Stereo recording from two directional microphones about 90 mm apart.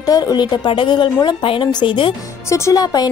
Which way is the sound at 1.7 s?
60° left (ahead or behind).